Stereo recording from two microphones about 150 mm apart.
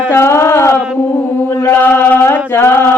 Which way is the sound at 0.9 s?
15° left (ahead or behind).